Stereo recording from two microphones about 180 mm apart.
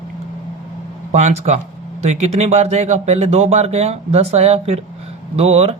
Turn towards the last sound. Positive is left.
turn(degrees=-35)  # may be behind; listen again after turning